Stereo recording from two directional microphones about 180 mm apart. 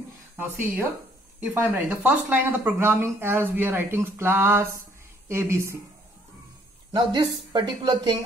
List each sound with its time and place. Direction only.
1.4 s speech: 10° right (ahead or behind)
6.9 s speech: 25° right (ahead or behind)